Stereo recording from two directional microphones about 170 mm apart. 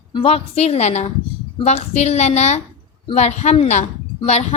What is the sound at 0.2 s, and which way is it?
Speech, 35° left (ahead or behind).